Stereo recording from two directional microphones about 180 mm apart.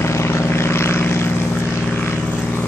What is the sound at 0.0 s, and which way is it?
Vehicle, 15° left (ahead or behind).